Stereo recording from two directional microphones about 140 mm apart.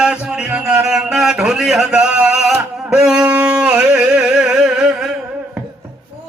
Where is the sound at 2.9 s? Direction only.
5° right (ahead or behind).